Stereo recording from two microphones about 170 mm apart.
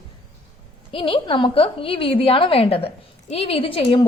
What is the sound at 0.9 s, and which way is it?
A woman's voice, 30° left (ahead or behind).